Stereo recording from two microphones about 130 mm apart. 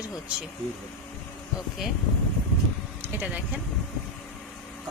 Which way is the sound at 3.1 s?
10° right (ahead or behind).